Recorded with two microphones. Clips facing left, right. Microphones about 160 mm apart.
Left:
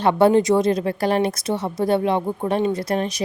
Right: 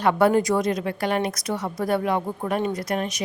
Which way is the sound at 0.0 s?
25° left (ahead or behind).